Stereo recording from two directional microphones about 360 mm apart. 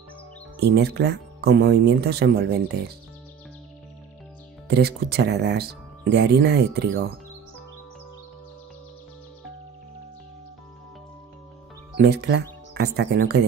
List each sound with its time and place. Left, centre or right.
0.6 s speech: right
4.6 s speech: right
12.0 s speech: right